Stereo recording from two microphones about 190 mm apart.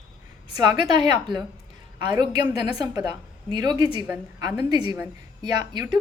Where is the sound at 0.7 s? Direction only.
25° right (ahead or behind).